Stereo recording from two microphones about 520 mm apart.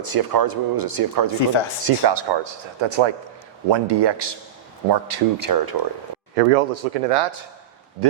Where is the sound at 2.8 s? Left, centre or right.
Right.